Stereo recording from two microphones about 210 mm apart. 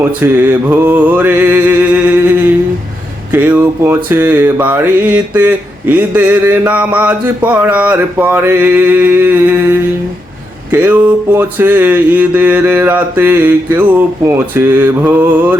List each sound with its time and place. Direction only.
0.0 s mantra: 10° right (ahead or behind)